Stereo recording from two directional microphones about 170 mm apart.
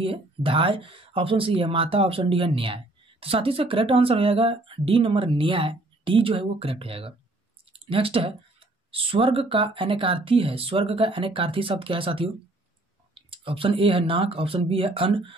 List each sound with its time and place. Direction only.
0.0 s speech: 30° right (ahead or behind)